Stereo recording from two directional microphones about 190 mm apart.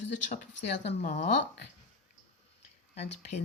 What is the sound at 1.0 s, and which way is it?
Speech, 40° left (ahead or behind).